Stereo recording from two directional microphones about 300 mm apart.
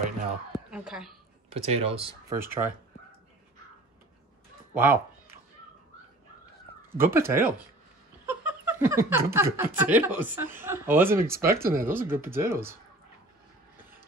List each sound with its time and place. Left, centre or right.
0.0 s a sound: centre
1.5 s speech: centre
4.7 s speech: centre
6.9 s speech: centre